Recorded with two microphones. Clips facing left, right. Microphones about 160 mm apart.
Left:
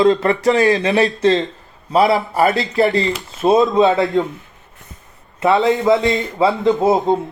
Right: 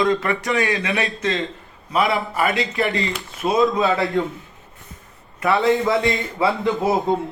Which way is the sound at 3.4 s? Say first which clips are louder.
Left 6 dB; 25° left (ahead or behind).